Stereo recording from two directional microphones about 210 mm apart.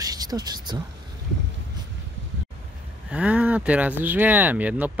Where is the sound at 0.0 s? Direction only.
20° right (ahead or behind).